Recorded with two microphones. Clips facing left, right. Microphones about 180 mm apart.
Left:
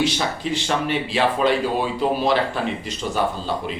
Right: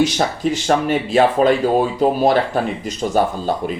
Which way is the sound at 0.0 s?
45° right (ahead or behind).